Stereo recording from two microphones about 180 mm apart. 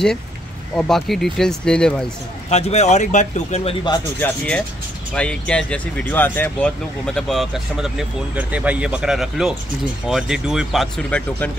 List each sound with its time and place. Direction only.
0.7 s speech: centre (ahead or behind)
2.5 s speech: 35° left (ahead or behind)
4.2 s speech: 5° left (ahead or behind)